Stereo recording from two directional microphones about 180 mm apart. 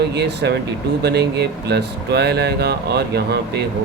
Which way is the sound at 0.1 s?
70° right (ahead or behind).